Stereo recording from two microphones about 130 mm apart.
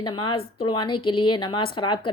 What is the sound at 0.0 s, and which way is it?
A woman's voice, 35° left (ahead or behind).